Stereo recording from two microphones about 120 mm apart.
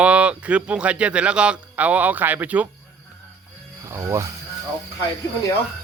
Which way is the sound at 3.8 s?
25° right (ahead or behind).